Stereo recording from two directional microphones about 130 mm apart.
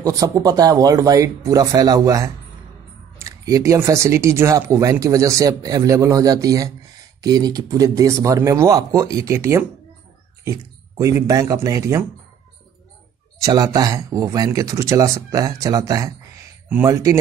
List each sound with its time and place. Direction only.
0.0 s speech: 25° right (ahead or behind)
13.4 s speech: 30° right (ahead or behind)